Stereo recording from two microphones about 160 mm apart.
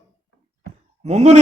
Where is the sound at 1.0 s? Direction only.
45° right (ahead or behind).